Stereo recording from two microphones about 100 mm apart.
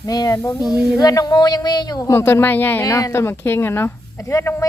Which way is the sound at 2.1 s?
25° left (ahead or behind).